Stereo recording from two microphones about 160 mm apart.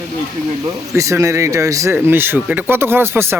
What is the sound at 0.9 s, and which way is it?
A man's voice, 20° right (ahead or behind).